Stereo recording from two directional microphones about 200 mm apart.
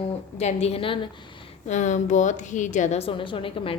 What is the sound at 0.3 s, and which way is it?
A woman's voice, 35° left (ahead or behind).